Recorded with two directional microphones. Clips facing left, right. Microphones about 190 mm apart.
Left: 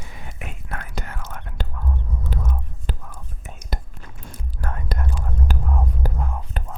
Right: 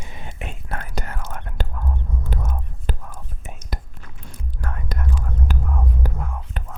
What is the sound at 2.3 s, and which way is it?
Whispering, 50° right (ahead or behind).